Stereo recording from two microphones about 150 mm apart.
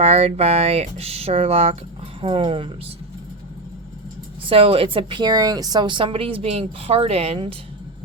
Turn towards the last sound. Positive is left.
turn(degrees=-40)  # may be behind; listen again after turning